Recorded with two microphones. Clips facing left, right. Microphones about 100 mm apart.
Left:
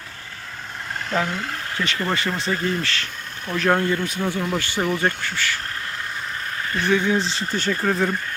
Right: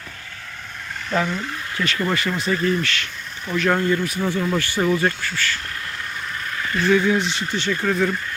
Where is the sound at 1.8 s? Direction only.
20° left (ahead or behind).